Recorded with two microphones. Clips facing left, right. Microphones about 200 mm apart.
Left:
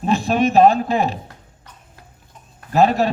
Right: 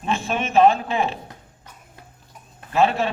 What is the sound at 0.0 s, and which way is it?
Speech, 35° left (ahead or behind).